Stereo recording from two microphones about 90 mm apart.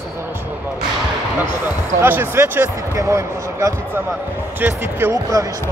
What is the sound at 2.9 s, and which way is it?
Speech, 35° right (ahead or behind).